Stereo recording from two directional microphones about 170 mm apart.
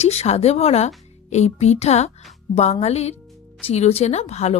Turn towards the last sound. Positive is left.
turn(degrees=40)  # may be behind; listen again after turning